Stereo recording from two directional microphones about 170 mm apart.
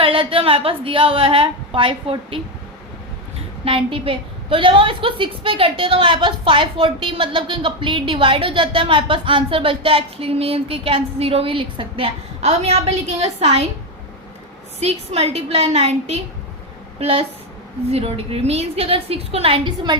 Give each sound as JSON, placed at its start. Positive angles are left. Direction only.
{"t": 0.0, "sound": "a woman's voice", "side_deg": -30}
{"t": 3.6, "sound": "a woman's voice", "side_deg": -30}
{"t": 14.8, "sound": "a woman's voice", "side_deg": -40}